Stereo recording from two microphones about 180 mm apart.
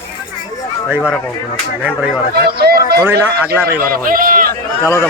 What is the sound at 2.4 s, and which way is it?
A man's voice, 60° right (ahead or behind).